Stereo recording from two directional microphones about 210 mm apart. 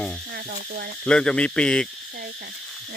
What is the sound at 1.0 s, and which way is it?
Speech, 5° left (ahead or behind).